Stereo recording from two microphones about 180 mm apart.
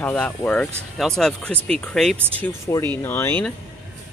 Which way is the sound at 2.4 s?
15° left (ahead or behind).